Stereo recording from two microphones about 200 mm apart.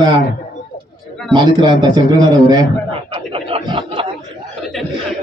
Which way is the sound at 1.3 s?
20° right (ahead or behind).